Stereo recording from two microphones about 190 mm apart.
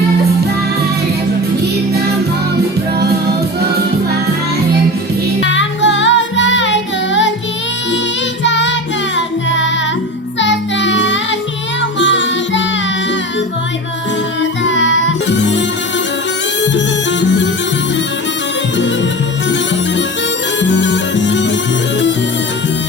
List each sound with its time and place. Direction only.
5.5 s music: 75° left (ahead or behind)
8.4 s child singing: 70° left (ahead or behind)
9.1 s music: 75° left (ahead or behind)
10.4 s child singing: 70° left (ahead or behind)
11.8 s music: 75° left (ahead or behind)
14.6 s music: 75° left (ahead or behind)
16.7 s music: 70° left (ahead or behind)
20.6 s music: 70° left (ahead or behind)